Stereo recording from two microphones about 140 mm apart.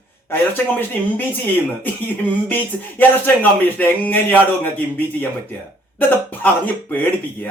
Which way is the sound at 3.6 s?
15° left (ahead or behind).